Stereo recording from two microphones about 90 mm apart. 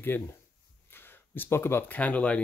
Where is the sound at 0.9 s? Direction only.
25° left (ahead or behind).